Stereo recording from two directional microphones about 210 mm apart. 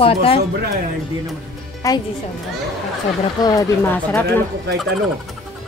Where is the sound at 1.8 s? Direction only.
15° left (ahead or behind).